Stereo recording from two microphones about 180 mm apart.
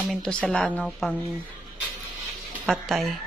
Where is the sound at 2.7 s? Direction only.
Centre (ahead or behind).